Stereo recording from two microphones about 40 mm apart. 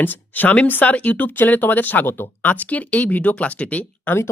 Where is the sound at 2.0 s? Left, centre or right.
Left.